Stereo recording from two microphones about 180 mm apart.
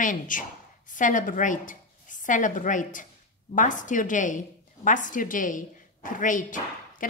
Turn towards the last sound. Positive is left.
turn(degrees=45)  # may be behind; listen again after turning